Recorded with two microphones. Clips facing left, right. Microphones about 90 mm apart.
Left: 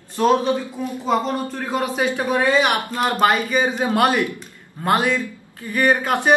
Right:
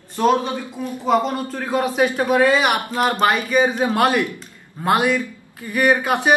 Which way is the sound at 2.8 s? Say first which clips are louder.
Even; 15° right (ahead or behind).